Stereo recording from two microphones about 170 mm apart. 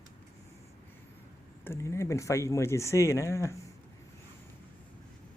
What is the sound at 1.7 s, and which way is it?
Speech, 15° left (ahead or behind).